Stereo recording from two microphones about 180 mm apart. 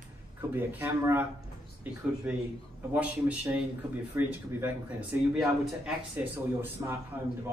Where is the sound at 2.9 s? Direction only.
10° right (ahead or behind).